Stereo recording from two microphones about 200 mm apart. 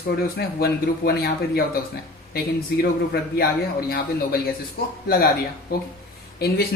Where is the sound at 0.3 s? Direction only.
50° left (ahead or behind).